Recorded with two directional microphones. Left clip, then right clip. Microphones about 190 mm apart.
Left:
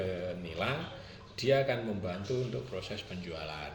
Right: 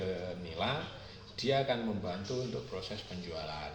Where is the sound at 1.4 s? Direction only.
40° left (ahead or behind).